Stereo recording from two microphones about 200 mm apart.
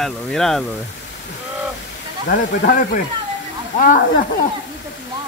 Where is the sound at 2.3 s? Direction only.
45° left (ahead or behind).